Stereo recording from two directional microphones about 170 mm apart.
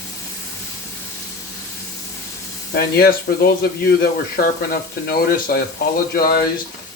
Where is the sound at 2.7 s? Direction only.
65° left (ahead or behind).